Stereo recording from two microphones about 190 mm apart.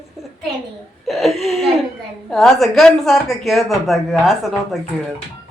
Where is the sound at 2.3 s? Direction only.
Centre (ahead or behind).